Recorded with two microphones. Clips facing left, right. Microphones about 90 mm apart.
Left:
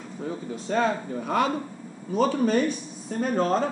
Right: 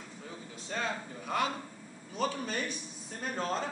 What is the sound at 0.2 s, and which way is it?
A man's voice, 50° left (ahead or behind).